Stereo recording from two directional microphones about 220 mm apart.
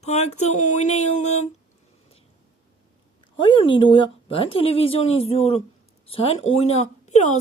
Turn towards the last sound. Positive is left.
turn(degrees=30)  # may be behind; listen again after turning